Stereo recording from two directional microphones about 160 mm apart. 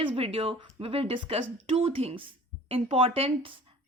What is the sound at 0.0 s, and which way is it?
A woman's voice, 35° right (ahead or behind).